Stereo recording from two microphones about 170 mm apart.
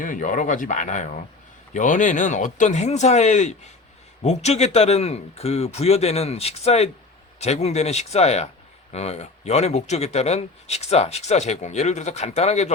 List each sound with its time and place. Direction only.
0.0 s speech: 50° left (ahead or behind)